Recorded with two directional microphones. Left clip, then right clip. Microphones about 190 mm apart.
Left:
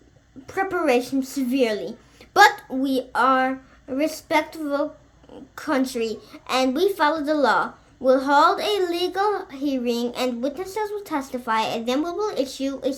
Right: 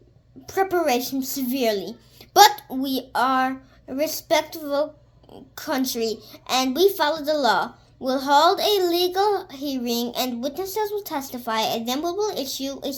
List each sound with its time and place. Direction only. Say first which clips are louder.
0.4 s a woman's voice: right 1 dB; 45° right (ahead or behind)